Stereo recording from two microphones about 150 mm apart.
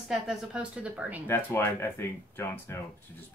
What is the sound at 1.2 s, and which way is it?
Speech, 15° left (ahead or behind).